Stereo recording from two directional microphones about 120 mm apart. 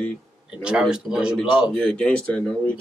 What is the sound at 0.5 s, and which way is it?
A man's voice, 5° right (ahead or behind).